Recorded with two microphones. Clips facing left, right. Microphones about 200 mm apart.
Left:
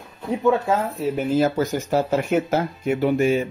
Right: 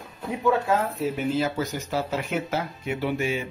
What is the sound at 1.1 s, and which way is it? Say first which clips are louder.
Speech: left 9 dB; 45° left (ahead or behind).